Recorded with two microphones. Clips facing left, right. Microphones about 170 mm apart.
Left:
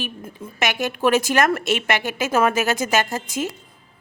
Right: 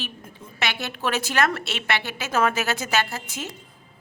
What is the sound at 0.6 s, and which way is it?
Speech, 45° left (ahead or behind).